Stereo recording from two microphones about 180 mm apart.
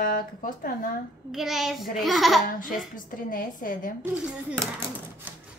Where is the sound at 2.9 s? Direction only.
50° left (ahead or behind).